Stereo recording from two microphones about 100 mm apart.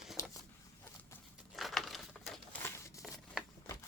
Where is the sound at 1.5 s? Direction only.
Centre (ahead or behind).